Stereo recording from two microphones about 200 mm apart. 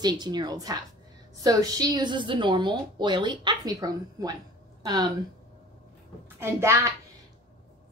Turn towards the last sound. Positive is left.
turn(degrees=-15)  # may be behind; listen again after turning